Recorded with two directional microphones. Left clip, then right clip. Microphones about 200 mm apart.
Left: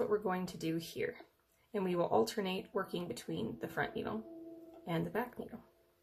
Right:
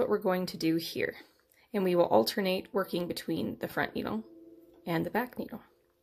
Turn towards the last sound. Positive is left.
turn(degrees=-40)  # may be behind; listen again after turning